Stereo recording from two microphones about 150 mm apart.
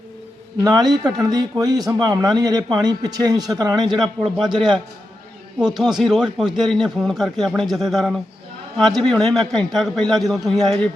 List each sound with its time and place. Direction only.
0.6 s a man's voice: 25° right (ahead or behind)
4.0 s a man's voice: centre (ahead or behind)
5.5 s a man's voice: 5° right (ahead or behind)